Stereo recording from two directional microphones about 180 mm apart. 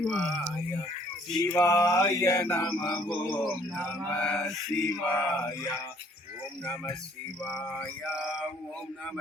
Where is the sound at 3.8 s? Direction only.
5° left (ahead or behind).